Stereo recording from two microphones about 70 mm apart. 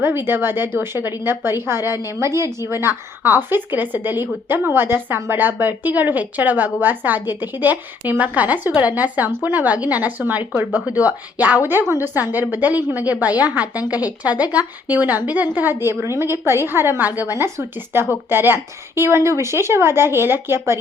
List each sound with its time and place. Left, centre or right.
0.0 s a woman's voice: right